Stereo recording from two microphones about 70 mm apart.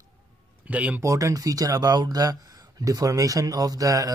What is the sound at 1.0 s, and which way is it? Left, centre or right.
Speech, right.